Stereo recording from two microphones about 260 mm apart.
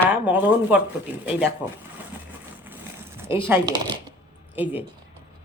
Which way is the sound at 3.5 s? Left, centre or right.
Centre.